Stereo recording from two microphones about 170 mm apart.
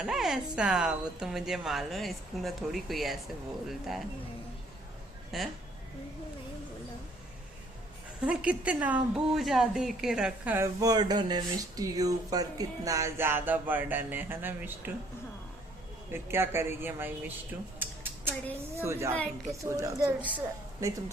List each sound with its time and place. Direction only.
0.0 s speech: centre (ahead or behind)
5.3 s speech: centre (ahead or behind)
8.2 s a woman's voice: 5° right (ahead or behind)
16.1 s a woman's voice: 15° right (ahead or behind)
17.7 s a sound: 10° right (ahead or behind)
18.8 s a woman's voice: 15° right (ahead or behind)
19.1 s a woman's voice: 10° left (ahead or behind)
19.7 s speech: 20° right (ahead or behind)